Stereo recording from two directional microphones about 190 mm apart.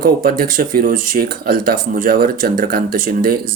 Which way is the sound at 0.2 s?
50° right (ahead or behind).